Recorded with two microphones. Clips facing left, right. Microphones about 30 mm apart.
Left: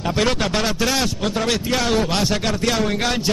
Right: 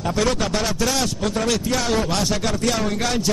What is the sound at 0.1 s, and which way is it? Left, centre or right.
A man's voice, left.